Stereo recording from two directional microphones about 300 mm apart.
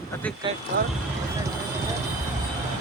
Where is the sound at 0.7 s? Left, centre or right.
Right.